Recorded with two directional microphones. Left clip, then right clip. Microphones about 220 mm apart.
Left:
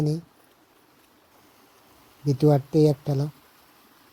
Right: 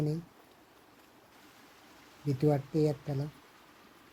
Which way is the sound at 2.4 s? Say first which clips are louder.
Left 9 dB; 30° left (ahead or behind).